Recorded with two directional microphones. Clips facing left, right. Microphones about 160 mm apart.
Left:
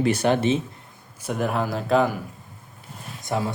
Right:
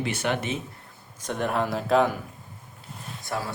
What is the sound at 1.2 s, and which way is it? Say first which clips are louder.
Speech: left 2 dB; 5° left (ahead or behind).